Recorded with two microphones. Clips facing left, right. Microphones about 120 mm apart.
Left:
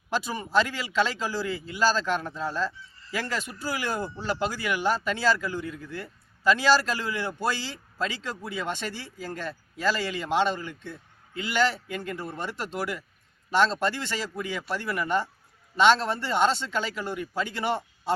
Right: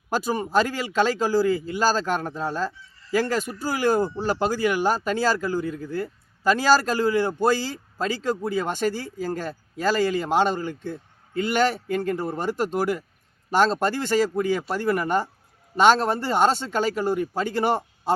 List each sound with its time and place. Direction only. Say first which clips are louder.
0.1 s speech: right 4 dB; 45° right (ahead or behind)